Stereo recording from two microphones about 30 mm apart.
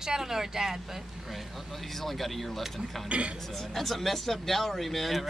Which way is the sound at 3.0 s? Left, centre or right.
Right.